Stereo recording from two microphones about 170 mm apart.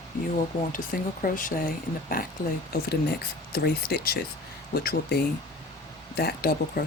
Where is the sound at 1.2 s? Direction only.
50° left (ahead or behind).